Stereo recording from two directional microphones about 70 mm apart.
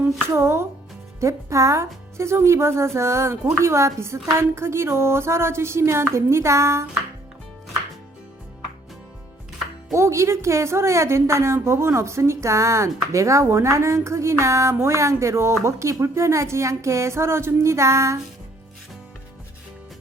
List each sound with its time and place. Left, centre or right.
0.3 s speech: right
9.9 s a woman's voice: right